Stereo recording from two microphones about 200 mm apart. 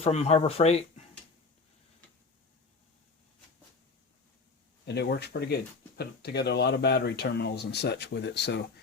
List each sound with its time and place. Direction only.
0.0 s speech: 30° left (ahead or behind)
4.9 s speech: 55° left (ahead or behind)